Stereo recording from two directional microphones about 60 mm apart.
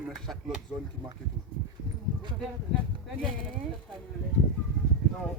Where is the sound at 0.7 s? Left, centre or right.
Centre.